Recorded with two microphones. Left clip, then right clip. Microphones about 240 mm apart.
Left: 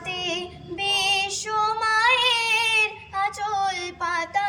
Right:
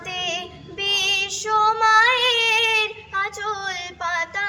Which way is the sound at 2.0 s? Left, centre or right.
Centre.